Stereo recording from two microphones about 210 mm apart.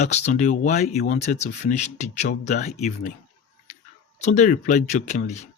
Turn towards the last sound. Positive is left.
turn(degrees=35)  # may be behind; listen again after turning